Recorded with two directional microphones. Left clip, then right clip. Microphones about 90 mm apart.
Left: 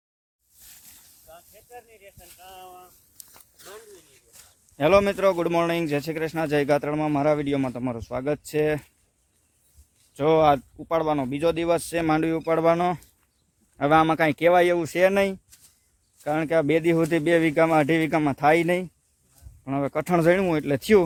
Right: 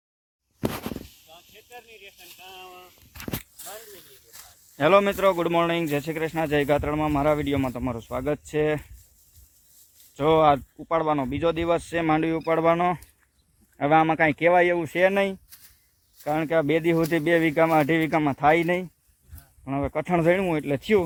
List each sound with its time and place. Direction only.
2.4 s speech: 30° left (ahead or behind)
4.3 s speech: 60° right (ahead or behind)
4.8 s speech: 5° left (ahead or behind)
10.2 s speech: 20° left (ahead or behind)
13.7 s speech: 45° left (ahead or behind); by 18.9 s 25° left (ahead or behind)
19.6 s speech: 45° left (ahead or behind); by 20.8 s 65° left (ahead or behind)